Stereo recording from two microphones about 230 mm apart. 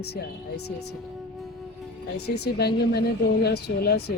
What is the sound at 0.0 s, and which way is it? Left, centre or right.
Speech, left.